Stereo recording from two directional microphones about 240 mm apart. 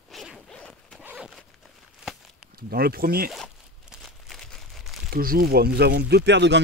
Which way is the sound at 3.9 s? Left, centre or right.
Centre.